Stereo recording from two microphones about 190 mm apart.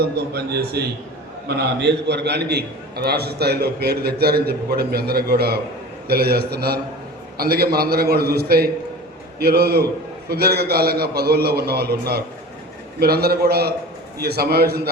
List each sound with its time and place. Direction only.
0.0 s a man's voice: 55° right (ahead or behind)